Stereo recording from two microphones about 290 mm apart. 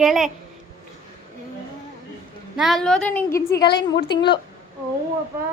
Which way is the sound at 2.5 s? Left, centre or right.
Centre.